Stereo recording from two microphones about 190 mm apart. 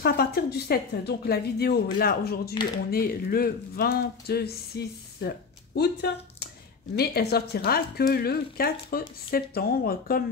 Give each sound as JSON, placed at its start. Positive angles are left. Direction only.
{"t": 0.0, "sound": "a woman's voice", "side_deg": 55}